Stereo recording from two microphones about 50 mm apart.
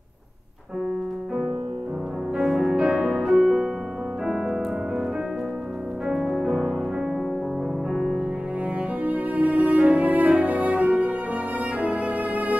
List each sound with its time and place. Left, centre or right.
2.3 s music: centre
3.4 s music: centre
6.0 s music: centre
9.0 s music: right